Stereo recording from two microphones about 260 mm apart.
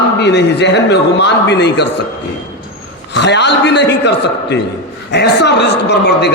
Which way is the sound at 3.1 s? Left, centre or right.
Left.